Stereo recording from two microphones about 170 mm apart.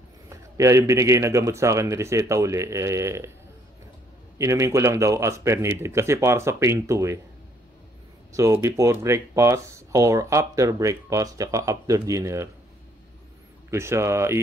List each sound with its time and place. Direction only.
0.3 s a man's voice: 20° right (ahead or behind)
4.4 s a man's voice: 15° right (ahead or behind)
8.3 s speech: 20° right (ahead or behind)
13.7 s a man's voice: 15° right (ahead or behind)